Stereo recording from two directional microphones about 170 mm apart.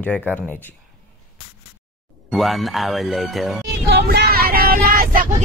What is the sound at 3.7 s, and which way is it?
Vehicle, 70° right (ahead or behind).